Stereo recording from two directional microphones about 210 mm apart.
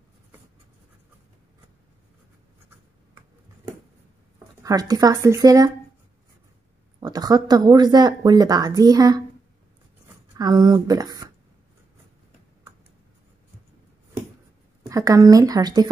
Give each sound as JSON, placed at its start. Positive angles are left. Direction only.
{"t": 4.6, "sound": "speech", "side_deg": -15}
{"t": 7.0, "sound": "speech", "side_deg": -20}
{"t": 10.3, "sound": "speech", "side_deg": -20}
{"t": 14.8, "sound": "speech", "side_deg": -15}